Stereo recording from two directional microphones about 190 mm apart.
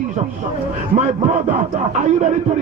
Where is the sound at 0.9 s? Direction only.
35° right (ahead or behind).